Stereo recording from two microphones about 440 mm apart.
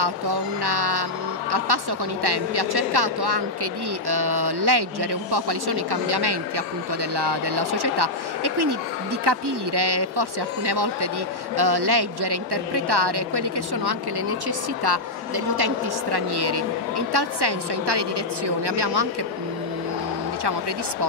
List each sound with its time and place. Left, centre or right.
0.0 s speech: right